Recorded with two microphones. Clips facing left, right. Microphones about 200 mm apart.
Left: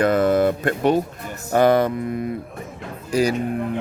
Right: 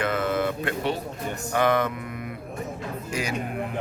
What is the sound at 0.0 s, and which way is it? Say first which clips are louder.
Speech: left 8 dB; 40° left (ahead or behind).